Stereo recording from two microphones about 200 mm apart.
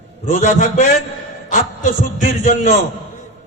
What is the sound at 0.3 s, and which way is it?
A man's voice, 40° left (ahead or behind).